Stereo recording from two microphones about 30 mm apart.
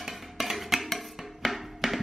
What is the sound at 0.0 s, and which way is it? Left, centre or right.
Music, centre.